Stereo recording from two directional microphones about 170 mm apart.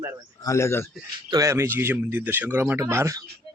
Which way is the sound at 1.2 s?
20° right (ahead or behind).